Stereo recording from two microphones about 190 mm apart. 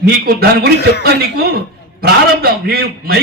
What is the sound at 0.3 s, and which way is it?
A man's voice, 55° right (ahead or behind).